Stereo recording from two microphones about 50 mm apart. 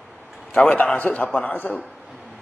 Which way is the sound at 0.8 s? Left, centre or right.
Left.